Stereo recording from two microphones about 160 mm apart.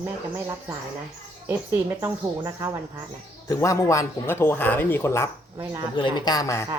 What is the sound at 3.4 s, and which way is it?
Speech, 20° left (ahead or behind).